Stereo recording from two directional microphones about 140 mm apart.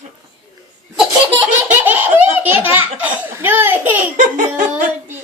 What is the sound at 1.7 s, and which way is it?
Laughter, 10° right (ahead or behind).